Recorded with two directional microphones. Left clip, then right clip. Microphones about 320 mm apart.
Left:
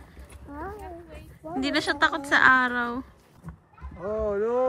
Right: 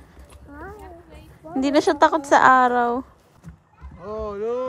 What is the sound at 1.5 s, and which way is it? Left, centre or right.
A woman's voice, centre.